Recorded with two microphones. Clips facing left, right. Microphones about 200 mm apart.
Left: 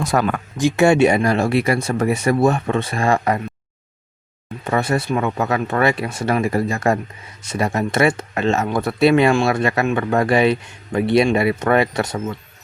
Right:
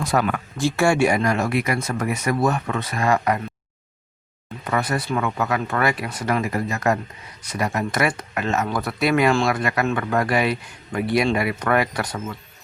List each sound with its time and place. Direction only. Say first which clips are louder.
0.0 s speech: left 2 dB; 45° left (ahead or behind)
0.5 s speech: left 5 dB; 20° left (ahead or behind)
4.6 s speech: left 4 dB; 25° left (ahead or behind)